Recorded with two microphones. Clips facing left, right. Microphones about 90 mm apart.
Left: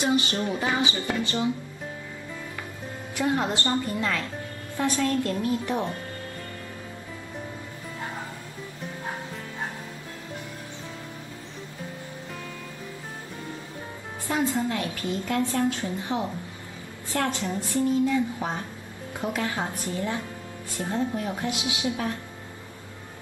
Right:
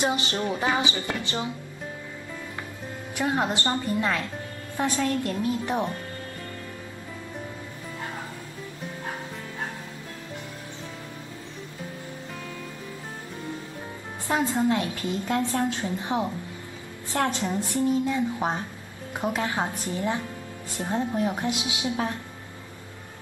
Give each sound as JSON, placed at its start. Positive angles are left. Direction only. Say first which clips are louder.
{"t": 0.0, "sound": "a woman's voice", "louder": "left 1 dB", "side_deg": -25}
{"t": 3.2, "sound": "a woman's voice", "louder": "even", "side_deg": -20}
{"t": 14.2, "sound": "a woman's voice", "louder": "right 2 dB", "side_deg": -25}